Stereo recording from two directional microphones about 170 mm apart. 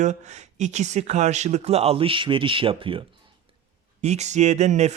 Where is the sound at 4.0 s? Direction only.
40° right (ahead or behind).